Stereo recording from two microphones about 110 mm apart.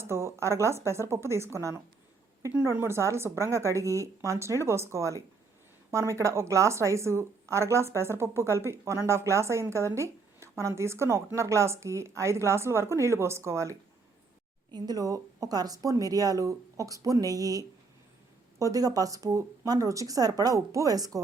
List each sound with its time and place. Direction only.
0.0 s a woman's voice: 25° right (ahead or behind)
14.7 s speech: 40° right (ahead or behind)